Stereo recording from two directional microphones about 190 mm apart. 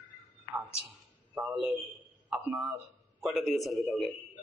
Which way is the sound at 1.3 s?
Centre (ahead or behind).